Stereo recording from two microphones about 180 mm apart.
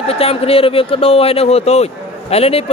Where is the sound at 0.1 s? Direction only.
35° left (ahead or behind).